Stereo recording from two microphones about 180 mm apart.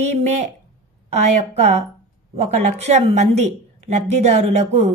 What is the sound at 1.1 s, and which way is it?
A woman's voice, 40° right (ahead or behind).